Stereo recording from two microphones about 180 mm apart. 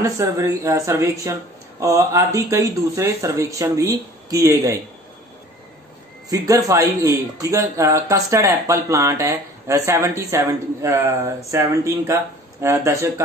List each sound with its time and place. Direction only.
0.0 s speech: 15° right (ahead or behind)
6.3 s speech: 15° right (ahead or behind)